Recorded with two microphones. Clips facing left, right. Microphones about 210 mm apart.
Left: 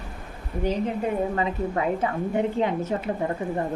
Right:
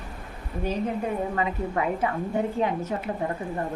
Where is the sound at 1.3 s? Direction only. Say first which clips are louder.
Left 1 dB; 30° left (ahead or behind).